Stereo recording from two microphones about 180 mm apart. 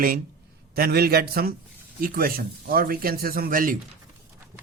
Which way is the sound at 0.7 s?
60° right (ahead or behind).